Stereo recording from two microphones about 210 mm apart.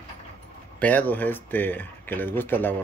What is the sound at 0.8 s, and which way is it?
Speech, 10° left (ahead or behind).